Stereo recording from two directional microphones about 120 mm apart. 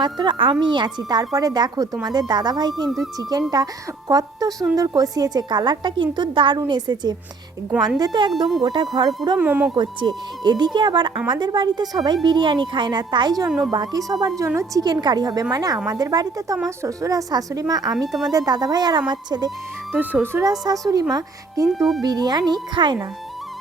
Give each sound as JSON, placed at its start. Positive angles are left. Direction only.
{"t": 0.0, "sound": "a woman's voice", "side_deg": -40}
{"t": 9.4, "sound": "speech", "side_deg": -15}
{"t": 9.7, "sound": "a woman's voice", "side_deg": -40}
{"t": 20.0, "sound": "speech", "side_deg": -15}
{"t": 20.4, "sound": "a woman's voice", "side_deg": -30}
{"t": 21.7, "sound": "speech", "side_deg": 0}
{"t": 22.0, "sound": "a woman's voice", "side_deg": -35}